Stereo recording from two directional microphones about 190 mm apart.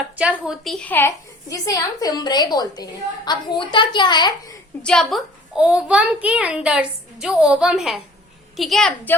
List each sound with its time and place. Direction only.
0.2 s a woman's voice: 5° right (ahead or behind); by 4.3 s 25° left (ahead or behind)
4.8 s a child's voice: 5° left (ahead or behind)